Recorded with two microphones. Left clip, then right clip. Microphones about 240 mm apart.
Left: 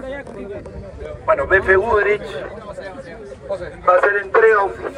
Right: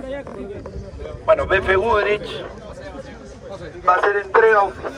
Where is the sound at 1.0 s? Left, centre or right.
Centre.